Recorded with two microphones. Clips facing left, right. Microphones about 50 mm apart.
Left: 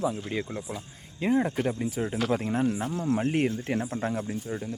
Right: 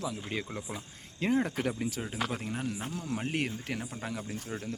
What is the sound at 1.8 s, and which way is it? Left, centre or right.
Speech, centre.